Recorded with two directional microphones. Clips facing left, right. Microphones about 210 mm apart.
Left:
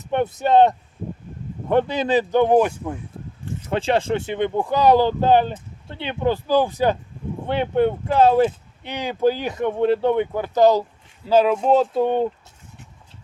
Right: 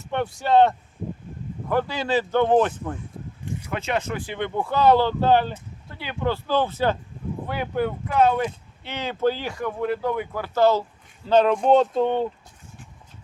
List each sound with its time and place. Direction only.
0.0 s speech: 20° left (ahead or behind)
3.7 s speech: 30° left (ahead or behind)
7.4 s speech: 25° left (ahead or behind)
8.8 s speech: 15° left (ahead or behind)